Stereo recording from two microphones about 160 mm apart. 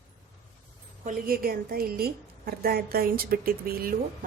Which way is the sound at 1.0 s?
65° right (ahead or behind).